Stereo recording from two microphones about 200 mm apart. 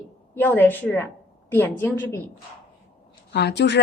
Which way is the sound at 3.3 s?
55° left (ahead or behind).